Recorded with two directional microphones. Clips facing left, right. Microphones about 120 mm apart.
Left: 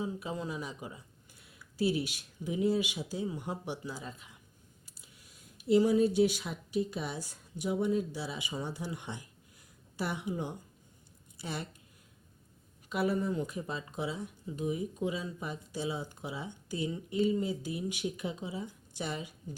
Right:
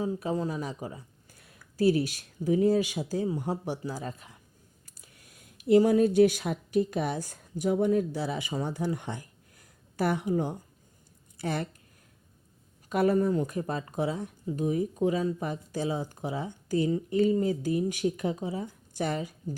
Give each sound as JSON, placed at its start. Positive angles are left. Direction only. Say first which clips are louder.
{"t": 0.0, "sound": "speech", "louder": "right 7 dB", "side_deg": -40}
{"t": 12.9, "sound": "speech", "louder": "right 7 dB", "side_deg": -45}